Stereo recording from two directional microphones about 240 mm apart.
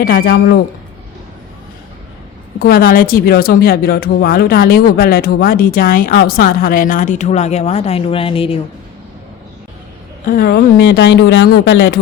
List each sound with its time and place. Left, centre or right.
0.0 s a woman's voice: left
2.6 s a woman's voice: left
10.2 s speech: left